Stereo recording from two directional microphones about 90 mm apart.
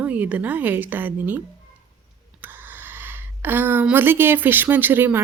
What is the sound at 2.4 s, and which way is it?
Speech, 20° right (ahead or behind).